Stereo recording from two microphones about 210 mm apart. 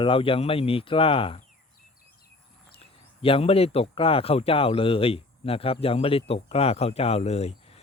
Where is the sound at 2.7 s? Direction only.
25° left (ahead or behind).